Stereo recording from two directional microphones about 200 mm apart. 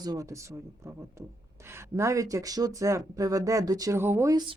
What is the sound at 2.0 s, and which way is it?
Speech, 15° right (ahead or behind).